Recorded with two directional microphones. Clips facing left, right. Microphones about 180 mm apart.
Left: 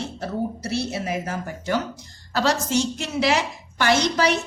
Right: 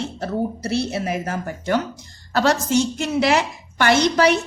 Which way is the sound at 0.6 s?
55° right (ahead or behind).